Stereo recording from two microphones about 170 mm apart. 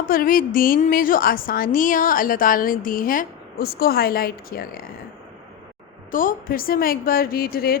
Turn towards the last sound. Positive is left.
turn(degrees=60)  # may be behind; listen again after turning